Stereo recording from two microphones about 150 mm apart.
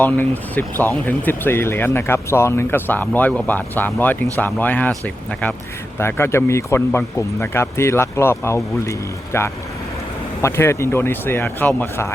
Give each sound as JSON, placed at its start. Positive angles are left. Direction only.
{"t": 0.0, "sound": "speech", "side_deg": 10}